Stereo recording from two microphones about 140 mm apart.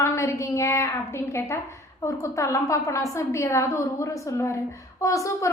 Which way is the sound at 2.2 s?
20° left (ahead or behind).